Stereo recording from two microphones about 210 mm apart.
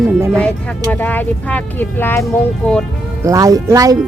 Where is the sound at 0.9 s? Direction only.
10° left (ahead or behind).